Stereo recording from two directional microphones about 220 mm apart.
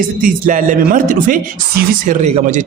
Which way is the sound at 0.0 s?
40° right (ahead or behind).